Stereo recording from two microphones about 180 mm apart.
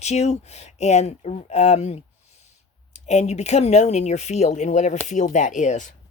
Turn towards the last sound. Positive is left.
turn(degrees=45)  # may be behind; listen again after turning